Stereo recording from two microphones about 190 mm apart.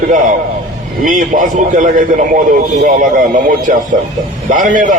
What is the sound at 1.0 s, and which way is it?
A man's voice, 45° right (ahead or behind).